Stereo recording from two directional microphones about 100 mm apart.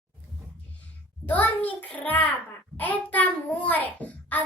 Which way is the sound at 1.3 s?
15° left (ahead or behind).